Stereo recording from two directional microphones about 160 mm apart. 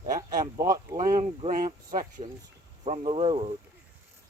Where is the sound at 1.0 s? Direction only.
55° right (ahead or behind).